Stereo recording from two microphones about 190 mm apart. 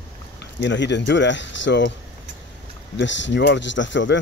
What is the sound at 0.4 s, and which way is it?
Speech, 70° left (ahead or behind).